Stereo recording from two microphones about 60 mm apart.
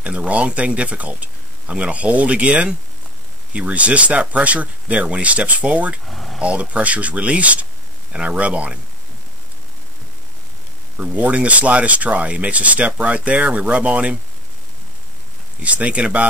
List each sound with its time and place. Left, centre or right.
0.0 s speech: right
6.0 s speech: centre
6.4 s speech: right
11.0 s speech: right
15.6 s speech: right